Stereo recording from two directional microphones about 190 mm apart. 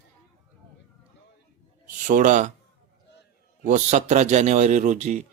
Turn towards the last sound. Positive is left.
turn(degrees=-40)  # may be behind; listen again after turning